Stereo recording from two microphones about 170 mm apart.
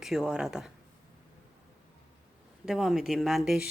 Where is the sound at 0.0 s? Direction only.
Centre (ahead or behind).